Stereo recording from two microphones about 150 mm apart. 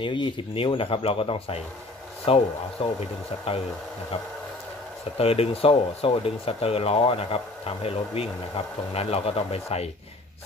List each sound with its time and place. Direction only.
0.0 s speech: 35° left (ahead or behind)
5.1 s speech: 40° left (ahead or behind)